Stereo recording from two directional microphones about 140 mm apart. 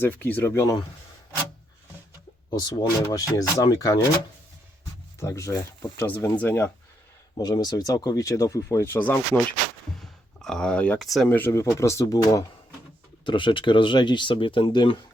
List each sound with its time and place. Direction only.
0.0 s speech: 15° left (ahead or behind)
2.5 s speech: 25° left (ahead or behind)
5.2 s speech: 20° left (ahead or behind)
7.3 s speech: 30° left (ahead or behind); by 11.3 s centre (ahead or behind)
11.3 s speech: 15° left (ahead or behind); by 15.0 s 35° left (ahead or behind)